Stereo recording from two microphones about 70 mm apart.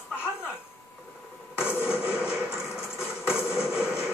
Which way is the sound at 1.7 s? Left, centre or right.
Left.